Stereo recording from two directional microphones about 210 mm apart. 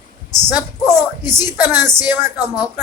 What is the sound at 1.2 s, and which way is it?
Speech, 20° left (ahead or behind).